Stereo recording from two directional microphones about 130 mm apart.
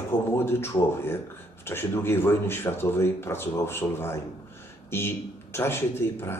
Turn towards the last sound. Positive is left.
turn(degrees=20)  # may be behind; listen again after turning